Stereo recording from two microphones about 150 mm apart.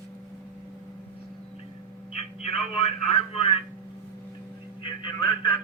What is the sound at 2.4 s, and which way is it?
A man's voice, 40° left (ahead or behind).